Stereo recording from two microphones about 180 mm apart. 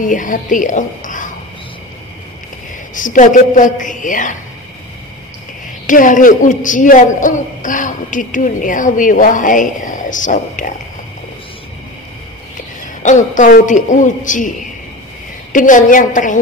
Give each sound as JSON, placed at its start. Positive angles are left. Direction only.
{"t": 0.0, "sound": "a woman's voice", "side_deg": 45}
{"t": 2.9, "sound": "a man's voice", "side_deg": 45}
{"t": 5.9, "sound": "a man's voice", "side_deg": 45}
{"t": 13.0, "sound": "a man's voice", "side_deg": 45}
{"t": 15.5, "sound": "a man's voice", "side_deg": 45}